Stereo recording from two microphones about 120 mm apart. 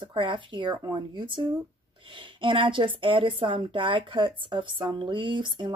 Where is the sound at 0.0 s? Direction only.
45° right (ahead or behind).